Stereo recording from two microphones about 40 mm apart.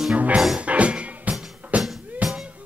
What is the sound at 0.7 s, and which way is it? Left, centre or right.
Music, right.